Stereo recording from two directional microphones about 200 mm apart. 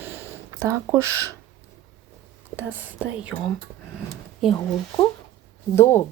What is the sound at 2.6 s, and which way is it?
Speech, 10° right (ahead or behind).